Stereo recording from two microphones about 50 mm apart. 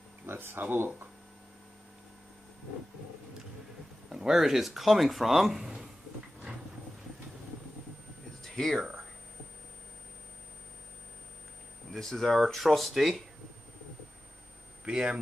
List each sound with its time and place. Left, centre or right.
0.3 s speech: right
4.1 s speech: centre
8.4 s a sound: centre
11.9 s speech: centre
14.9 s speech: centre